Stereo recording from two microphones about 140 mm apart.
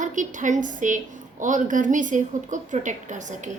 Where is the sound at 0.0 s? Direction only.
65° right (ahead or behind).